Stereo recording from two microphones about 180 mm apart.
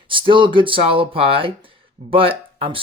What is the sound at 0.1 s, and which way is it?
Speech, 30° right (ahead or behind).